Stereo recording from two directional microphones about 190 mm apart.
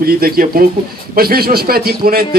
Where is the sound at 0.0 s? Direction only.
50° right (ahead or behind).